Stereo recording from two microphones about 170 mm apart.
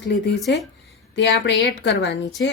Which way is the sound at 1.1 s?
90° left.